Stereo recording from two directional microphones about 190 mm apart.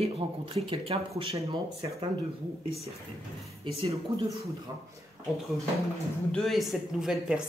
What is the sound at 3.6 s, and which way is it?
Speech, 30° right (ahead or behind).